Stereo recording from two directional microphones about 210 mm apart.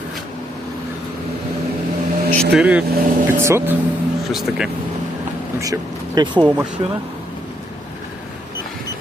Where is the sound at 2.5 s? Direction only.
5° right (ahead or behind).